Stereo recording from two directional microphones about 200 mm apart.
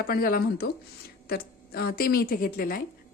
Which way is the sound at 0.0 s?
50° left (ahead or behind).